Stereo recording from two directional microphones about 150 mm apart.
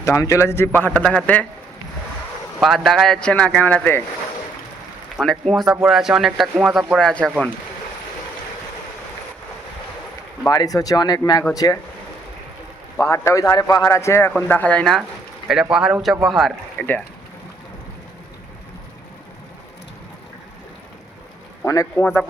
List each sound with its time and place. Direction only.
0.0 s a man's voice: 20° left (ahead or behind)
2.6 s a man's voice: centre (ahead or behind)
5.1 s a man's voice: centre (ahead or behind)
10.5 s a man's voice: 25° left (ahead or behind)
13.0 s a man's voice: 20° left (ahead or behind); by 15.0 s 5° left (ahead or behind)
15.7 s a man's voice: 5° right (ahead or behind)
16.7 s speech: 10° left (ahead or behind)
21.6 s a man's voice: 20° left (ahead or behind)